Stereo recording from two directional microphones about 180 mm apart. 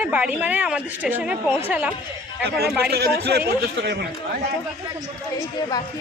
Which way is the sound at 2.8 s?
60° right (ahead or behind).